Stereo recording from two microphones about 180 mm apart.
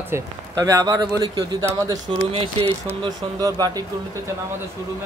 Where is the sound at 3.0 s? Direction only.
20° right (ahead or behind).